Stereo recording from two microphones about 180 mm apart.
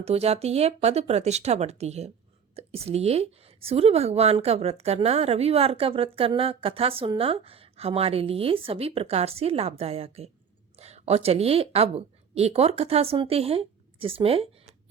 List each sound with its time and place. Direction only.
0.0 s a woman's voice: 35° right (ahead or behind)